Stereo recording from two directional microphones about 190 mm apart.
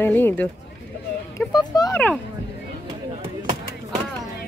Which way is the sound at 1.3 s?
20° left (ahead or behind).